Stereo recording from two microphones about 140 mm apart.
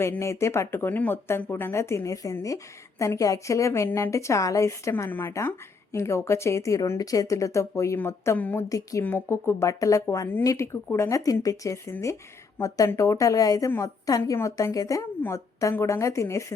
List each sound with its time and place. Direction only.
0.0 s a woman's voice: 20° left (ahead or behind)